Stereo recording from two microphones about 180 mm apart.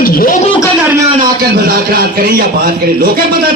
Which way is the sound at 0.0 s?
55° left (ahead or behind).